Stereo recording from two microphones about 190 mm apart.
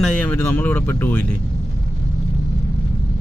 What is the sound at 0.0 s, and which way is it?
Speech, 10° left (ahead or behind).